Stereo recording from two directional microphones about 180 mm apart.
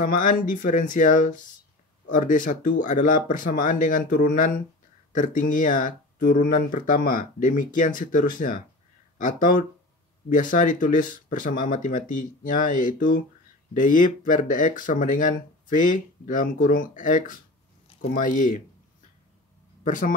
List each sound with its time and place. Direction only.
0.0 s speech: 50° left (ahead or behind)
19.8 s a man's voice: 45° left (ahead or behind)